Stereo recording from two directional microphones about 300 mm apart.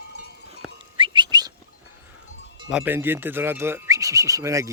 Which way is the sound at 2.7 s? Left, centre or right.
Centre.